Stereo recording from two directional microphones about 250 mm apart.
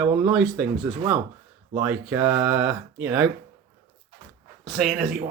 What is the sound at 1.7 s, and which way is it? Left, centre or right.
Speech, centre.